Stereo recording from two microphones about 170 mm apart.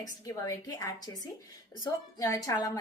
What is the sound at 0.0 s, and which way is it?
A woman's voice, 20° left (ahead or behind).